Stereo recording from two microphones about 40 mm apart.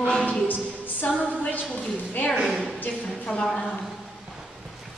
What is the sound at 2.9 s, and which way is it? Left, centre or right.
Speech, left.